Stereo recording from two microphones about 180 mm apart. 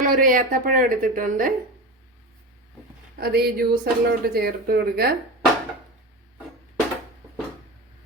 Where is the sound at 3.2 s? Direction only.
60° right (ahead or behind).